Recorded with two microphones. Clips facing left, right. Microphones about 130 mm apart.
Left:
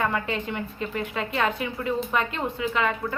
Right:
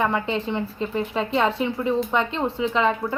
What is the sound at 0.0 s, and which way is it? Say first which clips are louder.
A woman's voice: right 3 dB; 25° right (ahead or behind).